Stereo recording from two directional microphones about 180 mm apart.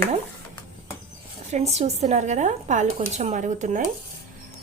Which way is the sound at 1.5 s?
40° right (ahead or behind).